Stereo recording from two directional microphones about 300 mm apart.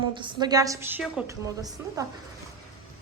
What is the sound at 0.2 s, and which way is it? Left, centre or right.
A woman's voice, centre.